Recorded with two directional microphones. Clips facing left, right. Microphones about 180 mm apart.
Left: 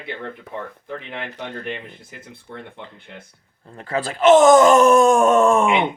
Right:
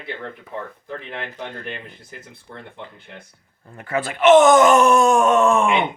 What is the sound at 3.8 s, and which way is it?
Speech, 30° left (ahead or behind).